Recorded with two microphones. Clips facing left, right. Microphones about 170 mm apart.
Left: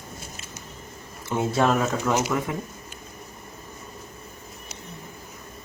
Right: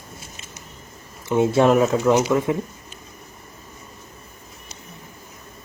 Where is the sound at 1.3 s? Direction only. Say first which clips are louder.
Right 6 dB; 25° right (ahead or behind).